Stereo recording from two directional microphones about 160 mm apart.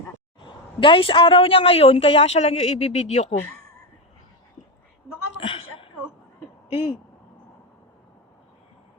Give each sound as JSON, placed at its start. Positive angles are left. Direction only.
{"t": 0.3, "sound": "a woman's voice", "side_deg": 30}
{"t": 5.4, "sound": "a sound", "side_deg": 35}
{"t": 6.7, "sound": "speech", "side_deg": 35}